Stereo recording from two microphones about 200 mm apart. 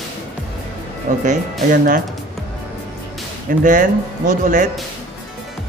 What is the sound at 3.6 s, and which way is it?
Speech, 40° right (ahead or behind).